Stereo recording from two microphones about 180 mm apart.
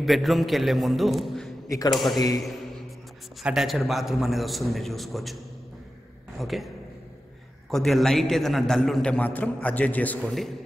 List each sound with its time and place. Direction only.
0.0 s a man's voice: centre (ahead or behind)
2.1 s a man's voice: 20° left (ahead or behind)
3.4 s a man's voice: centre (ahead or behind)
7.7 s a man's voice: centre (ahead or behind)